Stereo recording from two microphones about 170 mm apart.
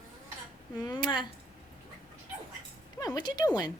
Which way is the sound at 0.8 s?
25° left (ahead or behind).